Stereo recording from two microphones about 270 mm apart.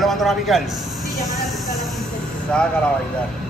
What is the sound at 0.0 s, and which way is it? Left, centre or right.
Speech, centre.